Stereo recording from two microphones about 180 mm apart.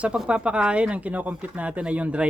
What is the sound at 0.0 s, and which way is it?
Speech, 5° right (ahead or behind).